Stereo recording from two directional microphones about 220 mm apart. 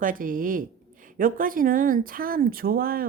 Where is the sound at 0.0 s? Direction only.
40° right (ahead or behind).